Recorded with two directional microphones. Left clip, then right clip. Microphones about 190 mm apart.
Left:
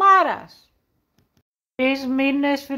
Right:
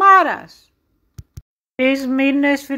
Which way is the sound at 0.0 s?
10° right (ahead or behind).